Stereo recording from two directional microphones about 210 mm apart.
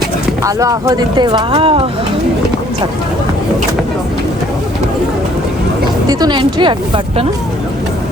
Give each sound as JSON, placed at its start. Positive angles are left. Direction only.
{"t": 0.4, "sound": "speech", "side_deg": -15}
{"t": 6.1, "sound": "speech", "side_deg": -20}